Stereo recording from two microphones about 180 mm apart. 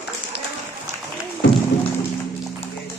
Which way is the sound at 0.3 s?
70° left (ahead or behind).